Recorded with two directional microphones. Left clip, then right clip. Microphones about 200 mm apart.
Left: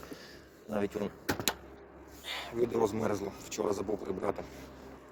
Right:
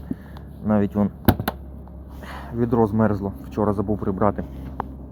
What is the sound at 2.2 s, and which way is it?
Speech, 5° left (ahead or behind).